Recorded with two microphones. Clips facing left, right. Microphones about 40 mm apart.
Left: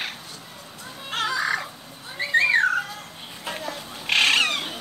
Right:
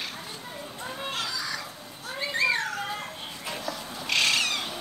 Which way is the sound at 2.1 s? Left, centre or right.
Left.